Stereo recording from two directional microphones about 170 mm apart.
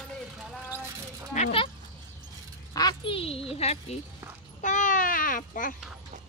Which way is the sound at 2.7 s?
25° left (ahead or behind).